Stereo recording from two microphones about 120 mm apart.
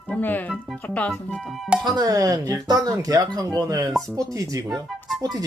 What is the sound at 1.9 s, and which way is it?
Speech, 30° right (ahead or behind).